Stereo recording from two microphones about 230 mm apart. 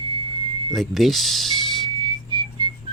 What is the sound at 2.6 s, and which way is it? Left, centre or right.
Whistling, centre.